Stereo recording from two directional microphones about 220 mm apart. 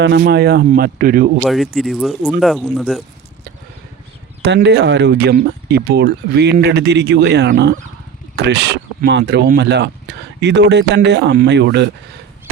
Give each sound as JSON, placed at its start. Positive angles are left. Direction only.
{"t": 0.0, "sound": "speech", "side_deg": -50}
{"t": 1.5, "sound": "speech", "side_deg": 0}
{"t": 4.4, "sound": "speech", "side_deg": -50}